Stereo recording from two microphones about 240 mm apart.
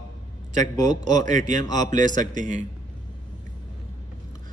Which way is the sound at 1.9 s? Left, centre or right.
Right.